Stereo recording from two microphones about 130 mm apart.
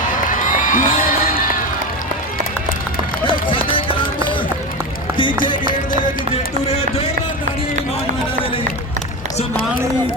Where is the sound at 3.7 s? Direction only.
40° left (ahead or behind).